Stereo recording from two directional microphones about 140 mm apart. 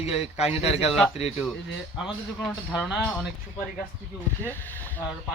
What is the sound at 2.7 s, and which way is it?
Speech, centre (ahead or behind).